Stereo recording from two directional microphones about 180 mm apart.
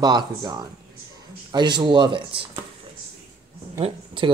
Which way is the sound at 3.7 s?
30° right (ahead or behind).